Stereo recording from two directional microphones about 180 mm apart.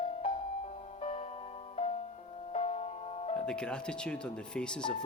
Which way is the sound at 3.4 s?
5° left (ahead or behind).